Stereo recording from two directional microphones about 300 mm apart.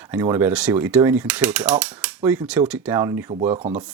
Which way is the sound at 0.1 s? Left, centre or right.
Centre.